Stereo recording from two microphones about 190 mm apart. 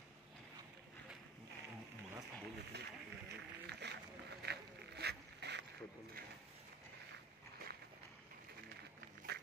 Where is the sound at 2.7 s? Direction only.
65° right (ahead or behind).